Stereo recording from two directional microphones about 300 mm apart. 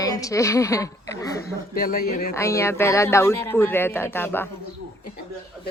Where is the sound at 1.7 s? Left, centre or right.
Left.